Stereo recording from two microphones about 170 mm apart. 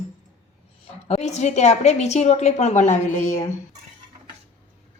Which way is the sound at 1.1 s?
40° left (ahead or behind).